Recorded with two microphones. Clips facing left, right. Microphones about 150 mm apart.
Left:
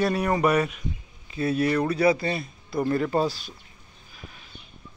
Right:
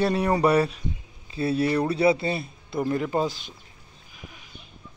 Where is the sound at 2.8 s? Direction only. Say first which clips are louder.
Left 1 dB; 15° right (ahead or behind).